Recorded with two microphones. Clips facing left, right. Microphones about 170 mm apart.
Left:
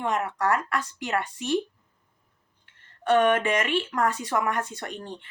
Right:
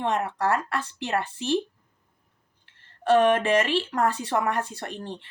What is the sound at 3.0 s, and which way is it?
Speech, 30° right (ahead or behind).